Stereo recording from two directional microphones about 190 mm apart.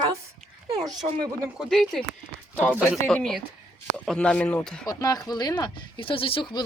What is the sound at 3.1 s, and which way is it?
Speech, centre (ahead or behind).